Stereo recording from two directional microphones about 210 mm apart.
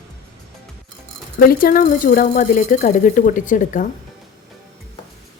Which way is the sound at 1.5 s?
45° left (ahead or behind).